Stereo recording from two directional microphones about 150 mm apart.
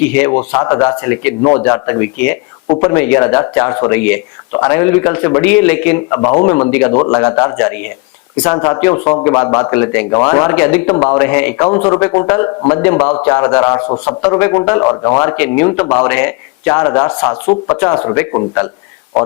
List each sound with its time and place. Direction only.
0.1 s a man's voice: 15° left (ahead or behind)
1.4 s a man's voice: 25° left (ahead or behind)
10.5 s a man's voice: 10° left (ahead or behind)